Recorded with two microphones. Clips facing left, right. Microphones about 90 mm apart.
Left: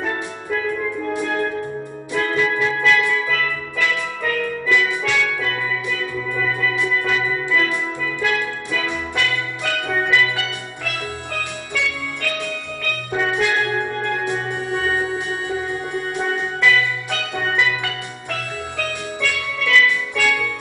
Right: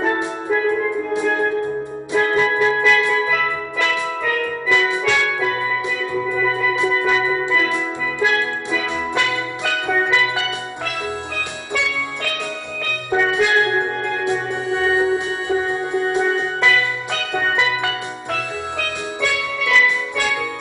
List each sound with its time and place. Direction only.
0.0 s music: 20° right (ahead or behind)
6.7 s music: 20° right (ahead or behind)
11.7 s music: 20° right (ahead or behind)
13.3 s music: 20° right (ahead or behind)
19.2 s music: 15° right (ahead or behind)